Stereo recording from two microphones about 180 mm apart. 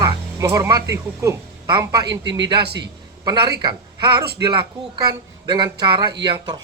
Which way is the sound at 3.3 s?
20° right (ahead or behind).